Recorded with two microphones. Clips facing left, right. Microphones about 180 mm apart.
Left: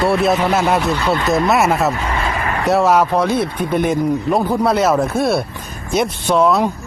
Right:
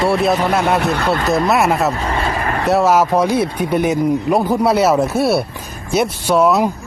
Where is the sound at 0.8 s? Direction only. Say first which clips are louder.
Right 1 dB; 60° right (ahead or behind).